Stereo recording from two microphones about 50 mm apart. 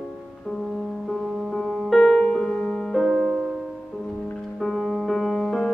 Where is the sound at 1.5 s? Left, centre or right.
Centre.